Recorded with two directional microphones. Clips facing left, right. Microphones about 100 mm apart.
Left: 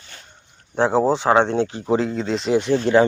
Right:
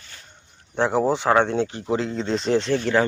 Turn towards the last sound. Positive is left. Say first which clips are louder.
# left 4 dB
turn(degrees=20)  # may be behind; listen again after turning